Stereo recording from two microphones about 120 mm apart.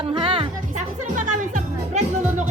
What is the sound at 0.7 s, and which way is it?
Music, 90° right.